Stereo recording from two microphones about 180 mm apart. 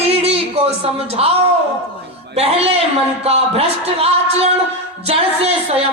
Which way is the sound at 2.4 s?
35° right (ahead or behind).